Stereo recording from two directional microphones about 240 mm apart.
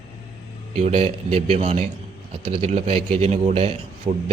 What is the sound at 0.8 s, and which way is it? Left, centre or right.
Speech, right.